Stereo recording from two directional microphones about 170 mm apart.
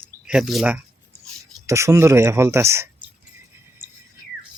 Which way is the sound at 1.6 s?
15° right (ahead or behind).